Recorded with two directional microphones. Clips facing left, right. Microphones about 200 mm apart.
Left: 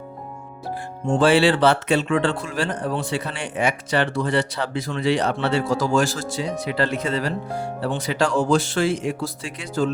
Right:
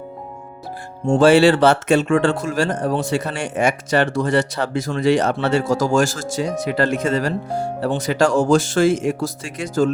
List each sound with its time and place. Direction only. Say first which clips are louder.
1.0 s speech: right 5 dB; 40° right (ahead or behind)